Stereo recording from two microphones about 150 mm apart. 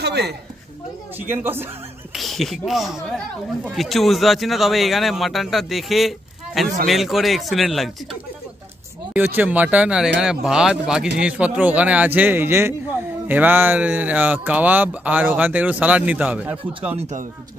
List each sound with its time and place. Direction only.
0.0 s a sound: 90° right
1.1 s speech: 15° right (ahead or behind)
2.1 s a man's voice: centre (ahead or behind)
9.1 s speech: 10° right (ahead or behind)
16.9 s speech: 50° right (ahead or behind)